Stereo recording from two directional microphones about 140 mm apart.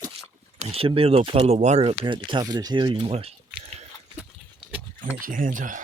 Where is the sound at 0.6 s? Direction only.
45° right (ahead or behind).